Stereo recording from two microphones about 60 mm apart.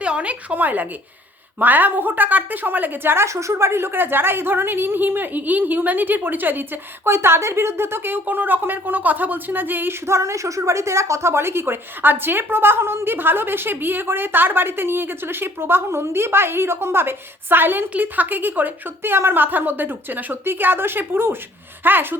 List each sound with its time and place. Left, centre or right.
0.0 s a woman's voice: centre; by 3.2 s right
3.2 s a woman's voice: right
7.1 s a woman's voice: right
10.1 s a woman's voice: right